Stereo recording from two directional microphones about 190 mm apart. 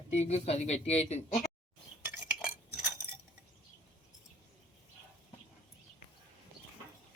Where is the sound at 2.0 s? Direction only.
10° right (ahead or behind).